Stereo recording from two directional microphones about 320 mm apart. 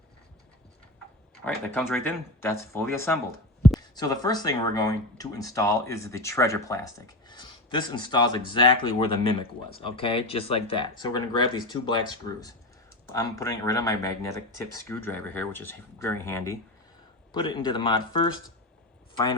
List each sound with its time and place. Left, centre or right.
1.5 s speech: centre